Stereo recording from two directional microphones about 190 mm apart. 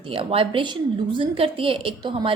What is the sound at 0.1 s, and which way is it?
A woman's voice, 30° right (ahead or behind).